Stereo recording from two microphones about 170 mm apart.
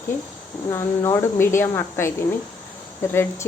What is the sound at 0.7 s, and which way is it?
Speech, 15° left (ahead or behind).